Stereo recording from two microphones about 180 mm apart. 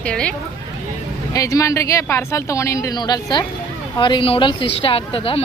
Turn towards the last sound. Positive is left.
turn(degrees=30)  # may be behind; listen again after turning